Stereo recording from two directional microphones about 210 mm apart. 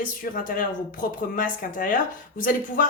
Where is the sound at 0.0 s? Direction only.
40° left (ahead or behind).